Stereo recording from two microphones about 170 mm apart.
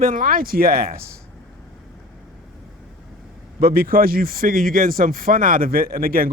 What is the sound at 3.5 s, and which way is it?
Speech, 60° right (ahead or behind).